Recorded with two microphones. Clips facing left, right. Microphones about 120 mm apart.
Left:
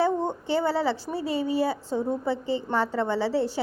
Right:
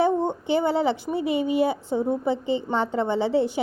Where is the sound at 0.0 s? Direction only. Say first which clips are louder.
Right 3 dB; 20° right (ahead or behind).